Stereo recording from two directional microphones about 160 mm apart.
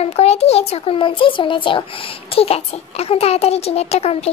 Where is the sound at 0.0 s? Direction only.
40° left (ahead or behind).